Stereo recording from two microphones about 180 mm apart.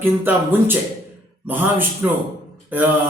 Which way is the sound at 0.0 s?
10° right (ahead or behind).